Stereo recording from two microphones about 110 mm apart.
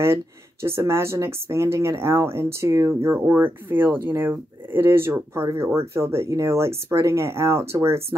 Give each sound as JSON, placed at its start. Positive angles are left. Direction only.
{"t": 0.0, "sound": "speech", "side_deg": -25}